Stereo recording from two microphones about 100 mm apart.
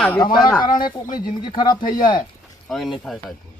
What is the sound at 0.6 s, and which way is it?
Speech, 50° left (ahead or behind).